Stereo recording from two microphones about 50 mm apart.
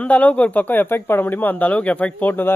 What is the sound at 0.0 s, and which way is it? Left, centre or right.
Speech, left.